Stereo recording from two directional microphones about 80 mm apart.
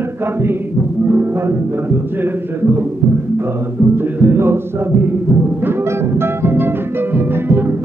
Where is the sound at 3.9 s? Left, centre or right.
Right.